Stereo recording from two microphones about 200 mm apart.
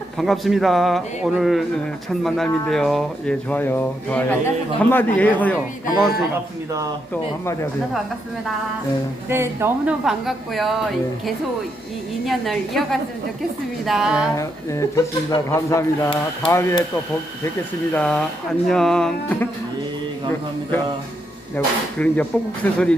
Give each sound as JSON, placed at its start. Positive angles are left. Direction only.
{"t": 0.2, "sound": "speech", "side_deg": 0}
{"t": 7.1, "sound": "speech", "side_deg": 15}
{"t": 9.3, "sound": "speech", "side_deg": -10}
{"t": 12.2, "sound": "speech", "side_deg": 0}
{"t": 14.3, "sound": "speech", "side_deg": 15}
{"t": 17.9, "sound": "speech", "side_deg": 5}
{"t": 21.5, "sound": "speech", "side_deg": 5}